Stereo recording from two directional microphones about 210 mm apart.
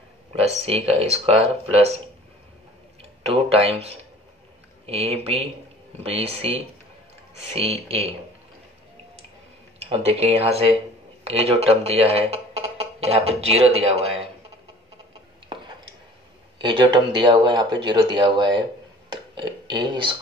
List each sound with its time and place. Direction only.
0.3 s speech: 30° right (ahead or behind)
3.0 s speech: 30° right (ahead or behind)
9.8 s speech: 30° right (ahead or behind)
16.6 s speech: 20° right (ahead or behind)